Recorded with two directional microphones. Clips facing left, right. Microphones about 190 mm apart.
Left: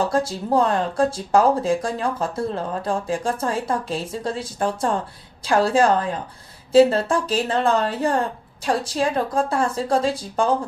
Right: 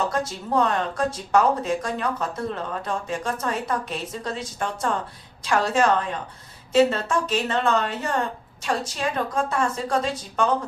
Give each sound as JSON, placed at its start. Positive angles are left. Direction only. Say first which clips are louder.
{"t": 0.0, "sound": "speech", "louder": "left 4 dB", "side_deg": 30}